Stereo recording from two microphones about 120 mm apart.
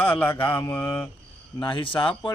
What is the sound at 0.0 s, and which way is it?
Mantra, 15° left (ahead or behind).